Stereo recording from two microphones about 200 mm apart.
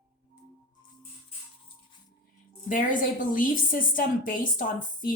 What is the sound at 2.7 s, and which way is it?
A woman's voice, 40° left (ahead or behind).